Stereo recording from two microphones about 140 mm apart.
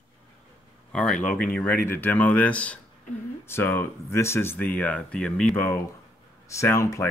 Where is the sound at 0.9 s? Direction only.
5° left (ahead or behind).